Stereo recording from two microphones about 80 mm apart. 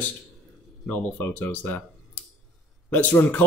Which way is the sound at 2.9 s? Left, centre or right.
Left.